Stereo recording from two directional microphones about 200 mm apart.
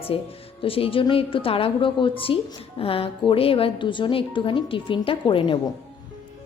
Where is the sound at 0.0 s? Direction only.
30° left (ahead or behind).